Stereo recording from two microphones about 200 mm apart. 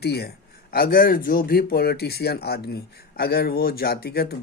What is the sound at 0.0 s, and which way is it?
A man's voice, 50° left (ahead or behind).